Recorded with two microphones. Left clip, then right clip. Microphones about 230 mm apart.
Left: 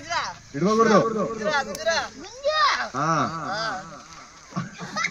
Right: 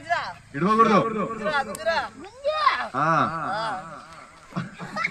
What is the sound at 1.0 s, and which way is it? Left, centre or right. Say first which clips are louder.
Speech: left 2 dB; right.